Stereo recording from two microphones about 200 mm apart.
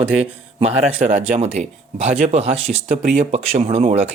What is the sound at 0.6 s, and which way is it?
Speech, 30° right (ahead or behind).